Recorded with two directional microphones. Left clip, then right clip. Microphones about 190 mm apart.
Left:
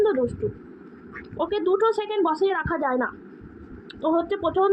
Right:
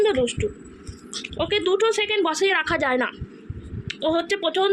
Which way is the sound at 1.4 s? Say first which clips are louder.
Right 1 dB; 5° left (ahead or behind).